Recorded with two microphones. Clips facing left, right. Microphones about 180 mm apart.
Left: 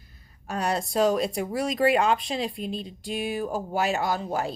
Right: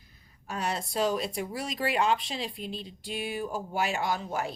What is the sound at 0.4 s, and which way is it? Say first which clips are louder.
Speech: left 5 dB; 45° left (ahead or behind).